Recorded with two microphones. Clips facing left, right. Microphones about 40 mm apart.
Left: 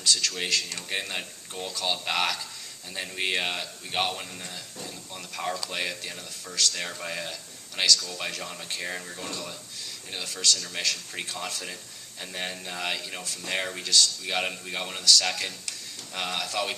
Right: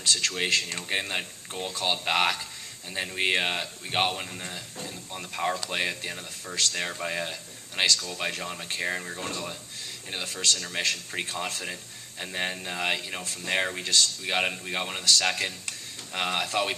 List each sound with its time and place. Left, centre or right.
0.0 s speech: right
0.9 s a man's voice: centre
2.9 s a man's voice: centre
4.4 s a man's voice: right
6.8 s a man's voice: centre
9.2 s a man's voice: right
12.2 s a man's voice: centre
13.2 s speech: right
13.5 s a man's voice: centre